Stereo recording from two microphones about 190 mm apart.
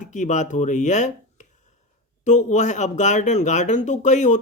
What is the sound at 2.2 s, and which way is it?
Speech, 40° left (ahead or behind).